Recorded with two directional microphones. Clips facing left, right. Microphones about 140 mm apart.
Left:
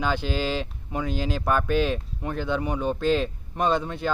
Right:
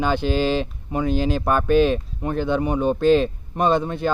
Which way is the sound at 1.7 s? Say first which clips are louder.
Right 10 dB; 50° right (ahead or behind).